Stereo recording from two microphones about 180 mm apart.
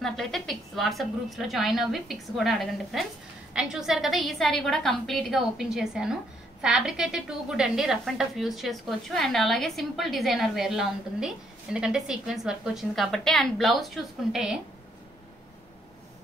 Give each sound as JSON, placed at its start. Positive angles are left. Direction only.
{"t": 0.0, "sound": "a woman's voice", "side_deg": 0}